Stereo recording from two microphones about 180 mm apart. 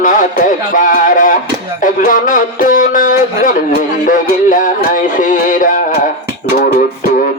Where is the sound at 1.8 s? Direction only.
45° left (ahead or behind).